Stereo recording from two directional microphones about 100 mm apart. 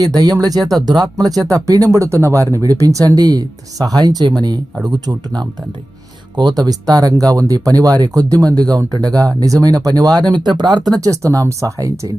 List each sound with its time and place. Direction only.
0.0 s speech: 40° right (ahead or behind)
6.3 s speech: 45° right (ahead or behind)